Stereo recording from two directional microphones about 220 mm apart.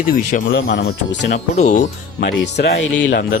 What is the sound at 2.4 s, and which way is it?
Speech, 50° left (ahead or behind).